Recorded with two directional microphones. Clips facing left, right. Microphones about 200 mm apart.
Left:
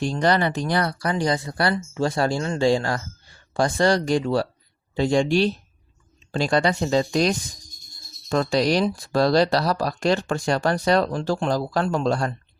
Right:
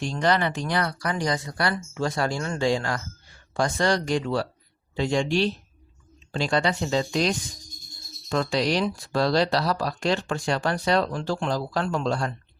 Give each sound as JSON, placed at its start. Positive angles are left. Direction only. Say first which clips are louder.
{"t": 0.0, "sound": "speech", "louder": "left 3 dB", "side_deg": 35}